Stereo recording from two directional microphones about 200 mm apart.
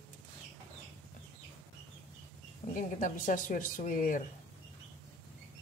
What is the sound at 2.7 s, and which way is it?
Speech, 40° left (ahead or behind).